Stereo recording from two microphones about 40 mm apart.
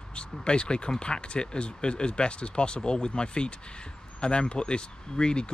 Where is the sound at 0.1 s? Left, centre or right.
Left.